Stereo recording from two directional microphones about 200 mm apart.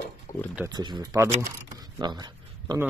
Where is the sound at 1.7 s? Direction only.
20° right (ahead or behind).